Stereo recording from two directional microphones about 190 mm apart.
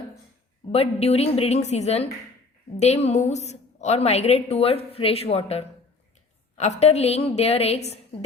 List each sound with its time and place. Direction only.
0.7 s a woman's voice: 30° left (ahead or behind)